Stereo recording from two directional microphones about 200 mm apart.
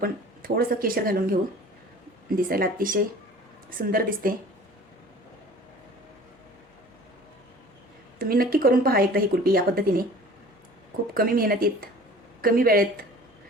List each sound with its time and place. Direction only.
0.0 s speech: 50° right (ahead or behind)
8.2 s speech: 45° right (ahead or behind)
11.1 s speech: 45° right (ahead or behind)